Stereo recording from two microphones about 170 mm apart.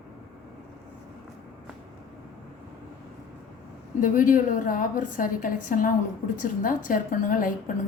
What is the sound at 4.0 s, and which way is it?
A woman's voice, 50° left (ahead or behind).